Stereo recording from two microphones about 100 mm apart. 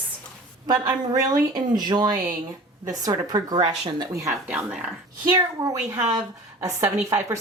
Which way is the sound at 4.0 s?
35° right (ahead or behind).